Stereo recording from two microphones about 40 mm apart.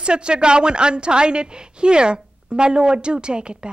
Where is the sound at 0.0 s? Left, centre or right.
Right.